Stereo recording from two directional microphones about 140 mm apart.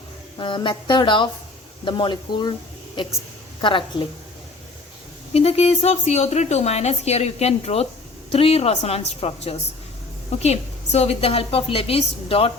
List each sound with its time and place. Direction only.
0.3 s speech: 35° left (ahead or behind)
5.3 s speech: 45° left (ahead or behind)